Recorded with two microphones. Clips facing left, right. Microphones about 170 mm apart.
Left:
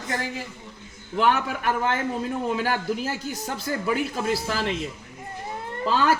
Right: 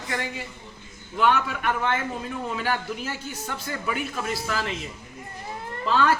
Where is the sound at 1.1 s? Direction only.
40° left (ahead or behind).